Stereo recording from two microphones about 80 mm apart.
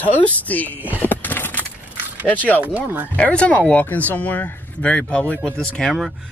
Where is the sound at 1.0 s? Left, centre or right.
Left.